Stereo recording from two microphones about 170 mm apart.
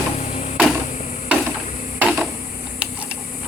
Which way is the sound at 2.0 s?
Centre (ahead or behind).